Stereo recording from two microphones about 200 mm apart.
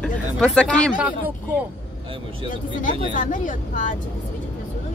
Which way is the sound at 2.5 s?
40° left (ahead or behind).